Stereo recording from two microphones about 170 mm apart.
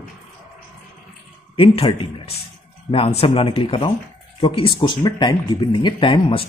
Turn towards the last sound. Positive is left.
turn(degrees=30)  # may be behind; listen again after turning